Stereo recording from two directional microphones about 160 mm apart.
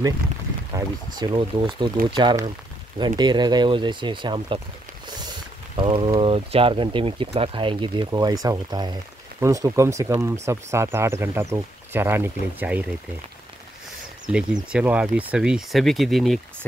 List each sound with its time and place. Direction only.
0.7 s speech: 25° right (ahead or behind)
5.8 s speech: 35° right (ahead or behind); by 12.8 s 10° right (ahead or behind)
14.2 s speech: 5° right (ahead or behind)